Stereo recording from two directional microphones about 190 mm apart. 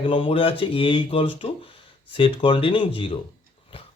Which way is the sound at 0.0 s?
25° left (ahead or behind).